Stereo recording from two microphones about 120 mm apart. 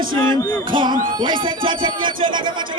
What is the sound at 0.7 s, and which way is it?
Speech, 40° right (ahead or behind).